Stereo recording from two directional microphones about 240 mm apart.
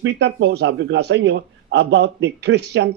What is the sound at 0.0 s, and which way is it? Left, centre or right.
Speech, right.